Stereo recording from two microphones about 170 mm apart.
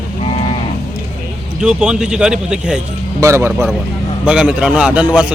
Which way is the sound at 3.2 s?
15° right (ahead or behind).